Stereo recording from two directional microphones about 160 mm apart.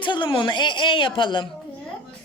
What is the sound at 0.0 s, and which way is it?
A woman's voice, 30° left (ahead or behind).